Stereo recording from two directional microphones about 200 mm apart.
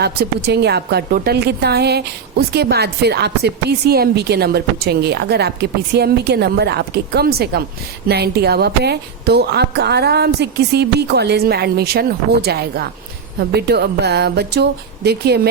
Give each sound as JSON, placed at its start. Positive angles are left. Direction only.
{"t": 0.0, "sound": "a woman's voice", "side_deg": -55}